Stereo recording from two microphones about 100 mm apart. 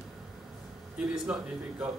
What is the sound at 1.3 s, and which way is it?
Speech, 10° right (ahead or behind).